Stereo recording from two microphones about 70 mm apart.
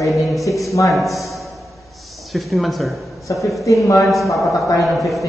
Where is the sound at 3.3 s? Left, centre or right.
Left.